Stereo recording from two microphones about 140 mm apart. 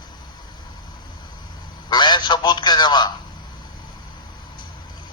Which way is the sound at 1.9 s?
30° left (ahead or behind).